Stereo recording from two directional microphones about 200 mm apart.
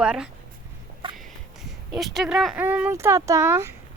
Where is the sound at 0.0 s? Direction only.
5° right (ahead or behind).